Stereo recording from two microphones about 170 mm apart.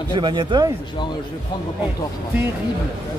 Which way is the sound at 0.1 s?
25° right (ahead or behind).